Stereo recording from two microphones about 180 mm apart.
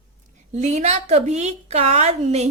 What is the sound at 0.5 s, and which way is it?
A woman's voice, 35° right (ahead or behind).